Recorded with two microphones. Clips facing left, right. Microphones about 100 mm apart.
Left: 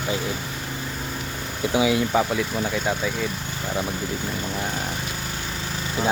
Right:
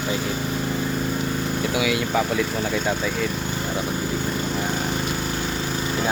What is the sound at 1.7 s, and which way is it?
Speech, 30° left (ahead or behind).